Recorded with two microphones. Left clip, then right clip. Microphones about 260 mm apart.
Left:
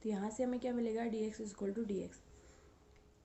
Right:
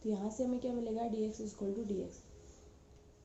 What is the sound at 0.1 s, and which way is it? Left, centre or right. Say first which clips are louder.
A woman's voice: right 1 dB; left.